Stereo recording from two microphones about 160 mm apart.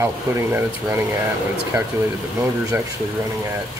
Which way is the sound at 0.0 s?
15° right (ahead or behind).